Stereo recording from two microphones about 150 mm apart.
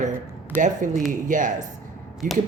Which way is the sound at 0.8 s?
60° right (ahead or behind).